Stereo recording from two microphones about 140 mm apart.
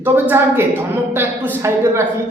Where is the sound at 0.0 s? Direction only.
15° right (ahead or behind).